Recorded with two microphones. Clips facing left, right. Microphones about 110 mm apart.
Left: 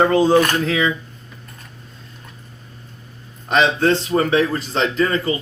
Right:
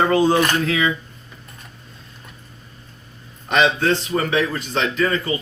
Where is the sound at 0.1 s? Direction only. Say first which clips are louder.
Left 2 dB; 25° left (ahead or behind).